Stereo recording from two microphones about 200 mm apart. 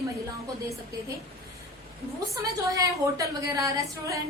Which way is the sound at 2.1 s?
15° right (ahead or behind).